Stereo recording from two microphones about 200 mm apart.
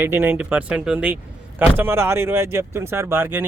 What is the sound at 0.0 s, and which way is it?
Speech, 10° right (ahead or behind).